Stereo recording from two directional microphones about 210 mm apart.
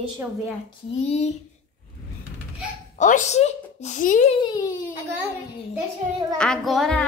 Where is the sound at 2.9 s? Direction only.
35° left (ahead or behind).